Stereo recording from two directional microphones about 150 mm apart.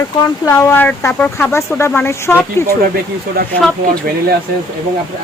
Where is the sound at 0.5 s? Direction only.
10° left (ahead or behind).